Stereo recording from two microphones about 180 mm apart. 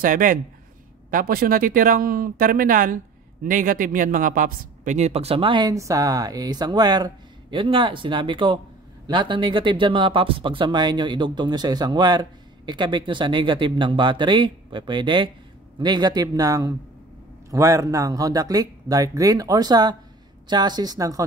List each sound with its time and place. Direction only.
0.0 s speech: 50° right (ahead or behind); by 21.2 s 20° right (ahead or behind)